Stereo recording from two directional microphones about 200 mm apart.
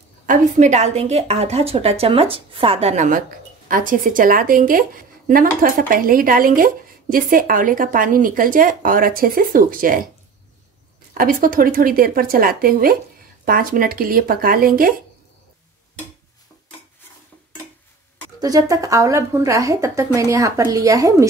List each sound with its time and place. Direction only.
0.3 s a woman's voice: 35° right (ahead or behind)
11.1 s speech: 45° right (ahead or behind)
18.4 s a woman's voice: 15° right (ahead or behind)